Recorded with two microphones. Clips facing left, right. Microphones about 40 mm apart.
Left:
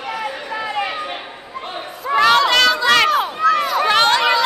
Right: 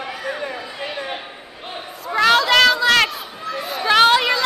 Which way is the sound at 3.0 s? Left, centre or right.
Left.